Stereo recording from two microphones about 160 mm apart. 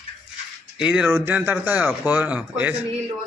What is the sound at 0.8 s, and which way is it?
Speech, 5° right (ahead or behind).